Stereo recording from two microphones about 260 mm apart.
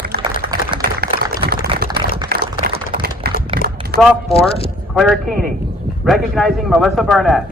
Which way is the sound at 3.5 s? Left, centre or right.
Right.